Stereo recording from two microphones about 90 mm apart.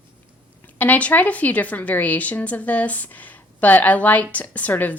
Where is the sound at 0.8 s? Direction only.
15° left (ahead or behind).